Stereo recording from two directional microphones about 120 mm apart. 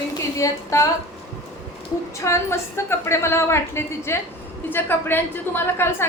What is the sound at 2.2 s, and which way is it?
A woman's voice, 25° left (ahead or behind).